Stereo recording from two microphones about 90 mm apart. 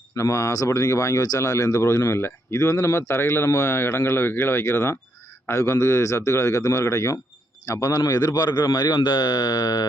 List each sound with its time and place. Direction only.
0.2 s a man's voice: 35° left (ahead or behind)
9.0 s speech: 60° left (ahead or behind)